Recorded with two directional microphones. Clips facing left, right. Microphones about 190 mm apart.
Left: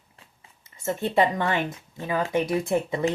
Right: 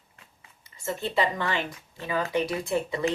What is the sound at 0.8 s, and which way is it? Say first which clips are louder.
Speech: left 4 dB; 50° left (ahead or behind).